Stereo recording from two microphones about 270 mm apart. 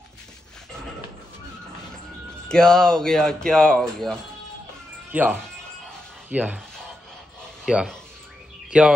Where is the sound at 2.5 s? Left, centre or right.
Centre.